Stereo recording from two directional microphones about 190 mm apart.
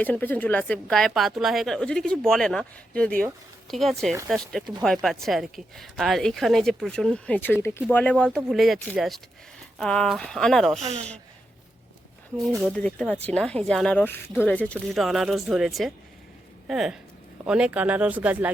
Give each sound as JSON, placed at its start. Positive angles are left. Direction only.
{"t": 0.0, "sound": "speech", "side_deg": 10}
{"t": 10.8, "sound": "speech", "side_deg": -35}
{"t": 12.5, "sound": "speech", "side_deg": -15}
{"t": 12.7, "sound": "speech", "side_deg": 5}